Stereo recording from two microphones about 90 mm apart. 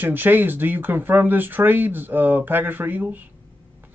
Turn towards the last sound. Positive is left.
turn(degrees=-20)  # may be behind; listen again after turning